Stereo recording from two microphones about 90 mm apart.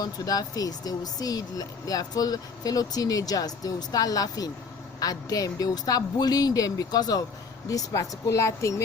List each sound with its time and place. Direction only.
0.0 s a woman's voice: 45° left (ahead or behind)